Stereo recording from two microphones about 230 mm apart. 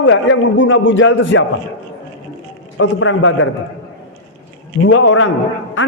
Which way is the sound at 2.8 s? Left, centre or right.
Left.